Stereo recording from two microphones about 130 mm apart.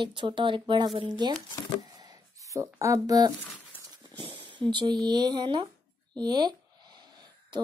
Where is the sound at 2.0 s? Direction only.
30° right (ahead or behind).